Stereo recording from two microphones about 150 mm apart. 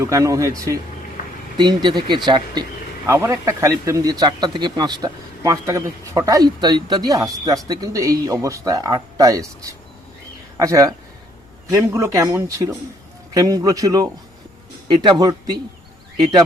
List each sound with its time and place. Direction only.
0.0 s speech: 20° right (ahead or behind)
15.2 s speech: 25° right (ahead or behind)